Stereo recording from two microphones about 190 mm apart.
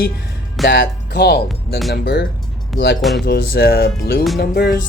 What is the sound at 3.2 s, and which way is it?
Speech, 55° left (ahead or behind).